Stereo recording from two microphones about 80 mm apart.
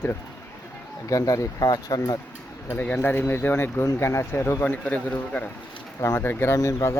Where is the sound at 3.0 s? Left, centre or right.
Left.